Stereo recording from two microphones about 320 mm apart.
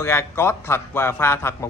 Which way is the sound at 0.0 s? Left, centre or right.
Centre.